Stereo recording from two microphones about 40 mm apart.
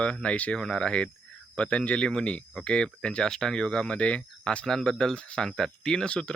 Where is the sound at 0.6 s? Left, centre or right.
Left.